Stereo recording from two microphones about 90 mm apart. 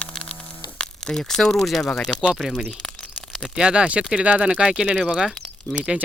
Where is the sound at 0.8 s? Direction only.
5° left (ahead or behind).